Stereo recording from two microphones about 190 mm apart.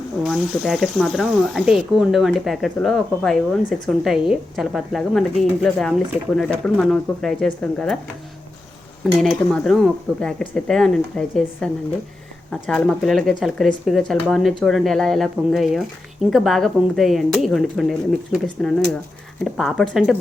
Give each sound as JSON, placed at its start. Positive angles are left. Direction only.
{"t": 0.3, "sound": "speech", "side_deg": 0}
{"t": 9.1, "sound": "speech", "side_deg": 0}